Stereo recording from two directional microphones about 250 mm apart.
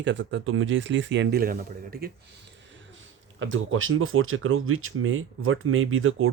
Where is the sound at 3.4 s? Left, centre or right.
Right.